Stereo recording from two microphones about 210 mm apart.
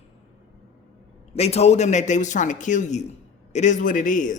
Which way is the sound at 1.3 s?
30° left (ahead or behind).